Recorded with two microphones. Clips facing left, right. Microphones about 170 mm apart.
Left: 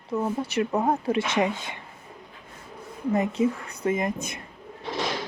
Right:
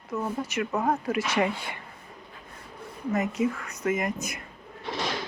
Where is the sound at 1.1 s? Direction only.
25° left (ahead or behind).